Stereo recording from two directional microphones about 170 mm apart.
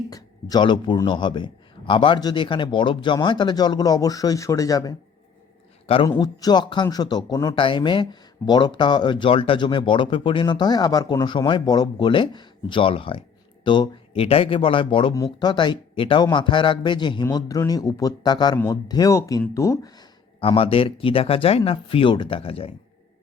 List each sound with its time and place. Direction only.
0.1 s speech: 20° left (ahead or behind)
5.8 s a man's voice: 35° left (ahead or behind)
6.1 s speech: 20° left (ahead or behind)
20.4 s speech: 35° left (ahead or behind)